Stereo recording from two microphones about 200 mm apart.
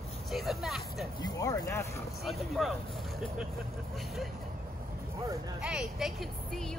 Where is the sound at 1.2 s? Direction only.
20° left (ahead or behind).